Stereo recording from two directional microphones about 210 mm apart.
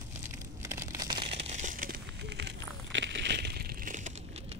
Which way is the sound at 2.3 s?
60° right (ahead or behind).